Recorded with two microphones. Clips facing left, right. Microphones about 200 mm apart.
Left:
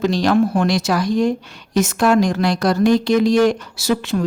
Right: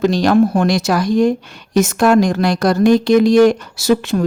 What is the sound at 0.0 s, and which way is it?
Speech, 45° right (ahead or behind).